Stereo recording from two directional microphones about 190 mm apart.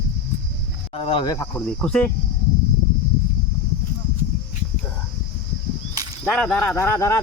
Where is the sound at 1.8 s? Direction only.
5° left (ahead or behind).